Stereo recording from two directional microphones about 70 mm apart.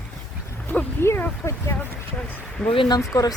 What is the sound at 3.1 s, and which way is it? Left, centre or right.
Speech, left.